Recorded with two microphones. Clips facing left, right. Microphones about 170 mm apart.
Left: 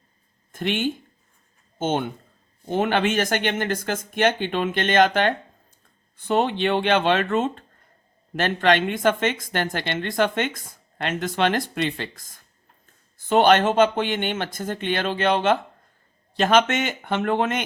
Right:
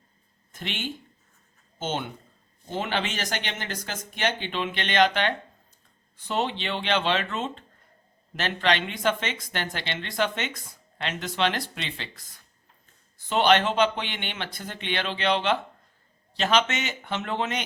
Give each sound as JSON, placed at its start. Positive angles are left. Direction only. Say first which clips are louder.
{"t": 0.5, "sound": "speech", "louder": "left 10 dB", "side_deg": 50}